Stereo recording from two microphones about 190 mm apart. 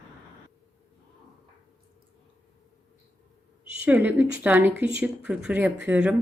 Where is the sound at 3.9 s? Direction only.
10° right (ahead or behind).